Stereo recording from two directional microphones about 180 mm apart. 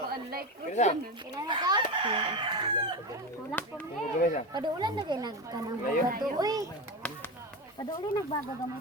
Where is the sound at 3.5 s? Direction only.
10° left (ahead or behind).